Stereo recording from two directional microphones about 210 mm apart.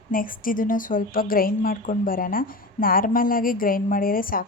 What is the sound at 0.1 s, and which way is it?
A woman's voice, 40° left (ahead or behind).